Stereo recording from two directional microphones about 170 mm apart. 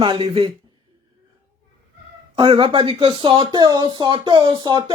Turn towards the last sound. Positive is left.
turn(degrees=-25)  # may be behind; listen again after turning